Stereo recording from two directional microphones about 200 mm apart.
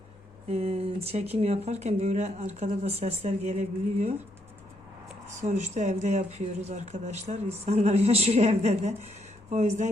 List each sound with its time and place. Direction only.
0.4 s speech: 30° right (ahead or behind)
5.4 s speech: 35° right (ahead or behind)